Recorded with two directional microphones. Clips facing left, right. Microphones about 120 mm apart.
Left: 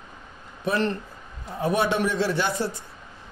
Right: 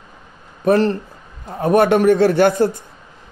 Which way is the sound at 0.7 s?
40° right (ahead or behind).